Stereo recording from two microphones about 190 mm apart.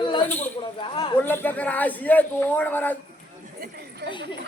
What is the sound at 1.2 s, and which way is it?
Speech, 10° left (ahead or behind).